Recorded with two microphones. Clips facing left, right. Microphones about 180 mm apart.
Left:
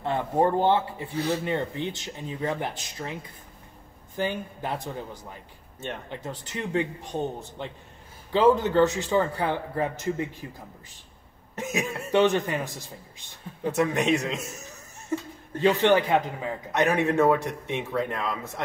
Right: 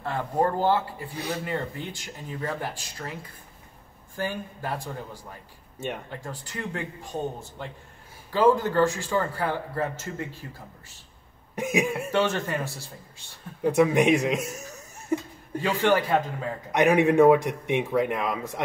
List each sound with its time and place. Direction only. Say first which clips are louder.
0.0 s a man's voice: left 2 dB; 20° left (ahead or behind)
4.2 s a man's voice: left 2 dB; 20° left (ahead or behind)
11.5 s a man's voice: right 4 dB; 15° right (ahead or behind)
12.1 s speech: left 3 dB; 15° left (ahead or behind)
13.7 s a man's voice: right 4 dB; 15° right (ahead or behind)
15.6 s a man's voice: left 3 dB; 20° left (ahead or behind)
16.7 s a man's voice: right 4 dB; 15° right (ahead or behind)